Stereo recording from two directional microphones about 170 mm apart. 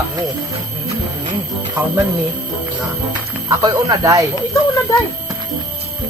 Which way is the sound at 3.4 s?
25° right (ahead or behind).